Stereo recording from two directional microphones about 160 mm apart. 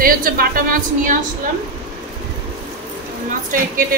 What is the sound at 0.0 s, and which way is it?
A woman's voice, 65° right (ahead or behind).